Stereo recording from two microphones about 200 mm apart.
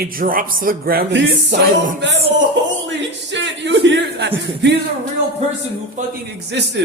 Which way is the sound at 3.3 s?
65° right (ahead or behind).